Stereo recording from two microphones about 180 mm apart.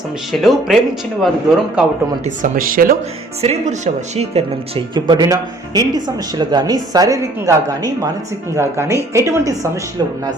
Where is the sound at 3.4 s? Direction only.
40° right (ahead or behind).